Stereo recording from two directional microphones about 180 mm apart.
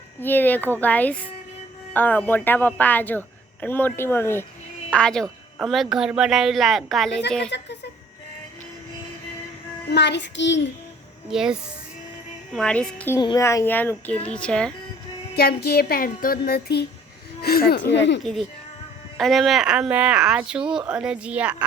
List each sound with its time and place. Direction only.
0.2 s speech: 10° left (ahead or behind)
7.5 s a woman's voice: 70° left (ahead or behind)
9.9 s a child's voice: 70° left (ahead or behind)
11.3 s speech: 5° right (ahead or behind)
13.1 s speech: 20° left (ahead or behind); by 14.7 s 5° left (ahead or behind)
15.4 s speech: 60° left (ahead or behind); by 18.2 s 75° left (ahead or behind)
19.1 s speech: centre (ahead or behind)